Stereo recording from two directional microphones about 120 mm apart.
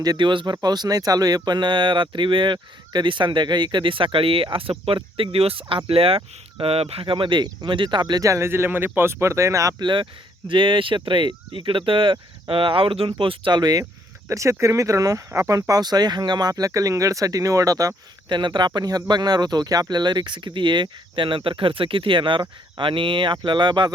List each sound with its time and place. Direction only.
0.0 s speech: 35° right (ahead or behind)
9.8 s speech: 40° right (ahead or behind)